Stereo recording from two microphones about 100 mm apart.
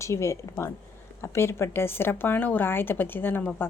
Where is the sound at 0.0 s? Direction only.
30° left (ahead or behind).